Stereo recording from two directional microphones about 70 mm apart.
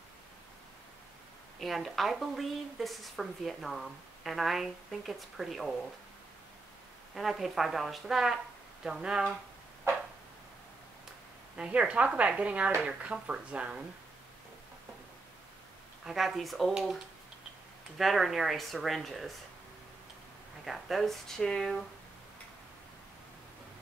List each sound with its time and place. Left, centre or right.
1.6 s a woman's voice: centre
7.2 s a woman's voice: centre
11.5 s speech: centre
16.1 s a woman's voice: centre
20.6 s a woman's voice: centre